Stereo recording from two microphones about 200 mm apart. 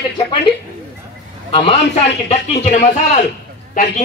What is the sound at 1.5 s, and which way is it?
A man's voice, 30° left (ahead or behind).